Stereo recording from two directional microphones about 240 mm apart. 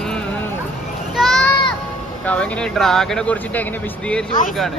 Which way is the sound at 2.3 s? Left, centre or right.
Centre.